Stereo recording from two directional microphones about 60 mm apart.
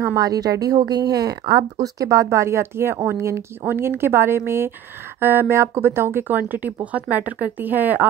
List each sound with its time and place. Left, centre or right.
0.1 s speech: right
3.6 s a woman's voice: right